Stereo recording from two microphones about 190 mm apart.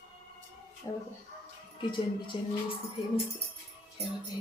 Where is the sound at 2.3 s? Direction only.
25° left (ahead or behind).